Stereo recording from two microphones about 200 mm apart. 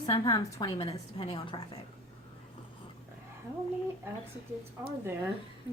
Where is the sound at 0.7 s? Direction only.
25° left (ahead or behind).